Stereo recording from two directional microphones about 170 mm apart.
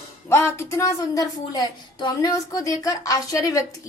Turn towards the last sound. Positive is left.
turn(degrees=20)  # may be behind; listen again after turning